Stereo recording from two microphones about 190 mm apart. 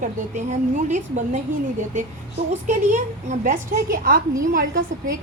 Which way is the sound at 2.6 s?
40° right (ahead or behind).